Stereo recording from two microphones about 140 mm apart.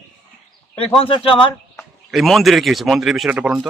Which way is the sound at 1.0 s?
40° left (ahead or behind).